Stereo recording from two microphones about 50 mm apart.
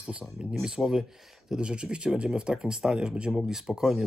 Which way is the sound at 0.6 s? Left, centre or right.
Centre.